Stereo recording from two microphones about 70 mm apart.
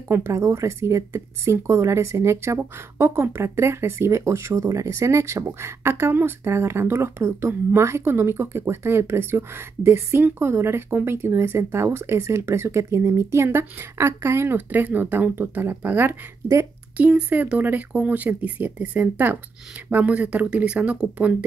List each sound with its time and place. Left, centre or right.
0.1 s speech: right
14.7 s speech: right